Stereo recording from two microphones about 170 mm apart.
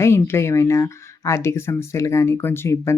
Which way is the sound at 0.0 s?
15° left (ahead or behind).